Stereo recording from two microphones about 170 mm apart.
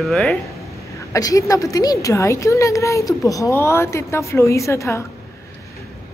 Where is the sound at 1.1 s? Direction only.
20° left (ahead or behind).